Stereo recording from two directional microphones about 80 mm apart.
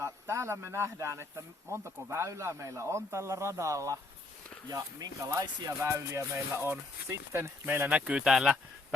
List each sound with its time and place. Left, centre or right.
0.0 s speech: right
5.8 s speech: right
7.9 s speech: centre